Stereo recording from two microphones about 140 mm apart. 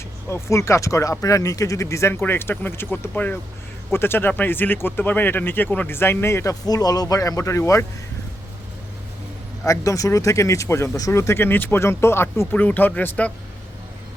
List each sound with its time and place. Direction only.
0.3 s speech: 20° left (ahead or behind)
9.6 s speech: 25° left (ahead or behind)